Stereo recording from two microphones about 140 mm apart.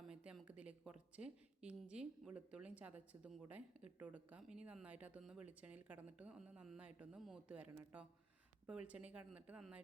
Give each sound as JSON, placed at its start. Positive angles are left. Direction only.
{"t": 0.0, "sound": "a woman's voice", "side_deg": -5}